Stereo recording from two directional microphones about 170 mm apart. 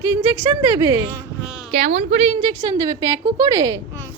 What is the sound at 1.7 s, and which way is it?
Speech, 40° right (ahead or behind).